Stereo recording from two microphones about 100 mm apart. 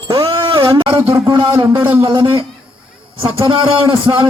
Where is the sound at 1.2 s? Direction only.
55° right (ahead or behind).